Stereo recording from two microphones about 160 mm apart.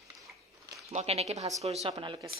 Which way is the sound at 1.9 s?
25° right (ahead or behind).